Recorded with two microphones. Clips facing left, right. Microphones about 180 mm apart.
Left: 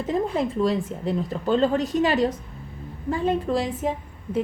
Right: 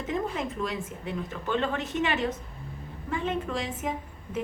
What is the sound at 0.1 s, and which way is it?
A woman's voice, 35° left (ahead or behind).